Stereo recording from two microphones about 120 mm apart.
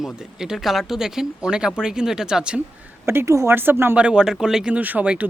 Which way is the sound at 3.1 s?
20° right (ahead or behind).